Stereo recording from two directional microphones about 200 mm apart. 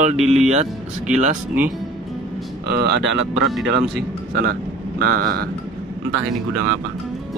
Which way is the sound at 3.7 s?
55° right (ahead or behind).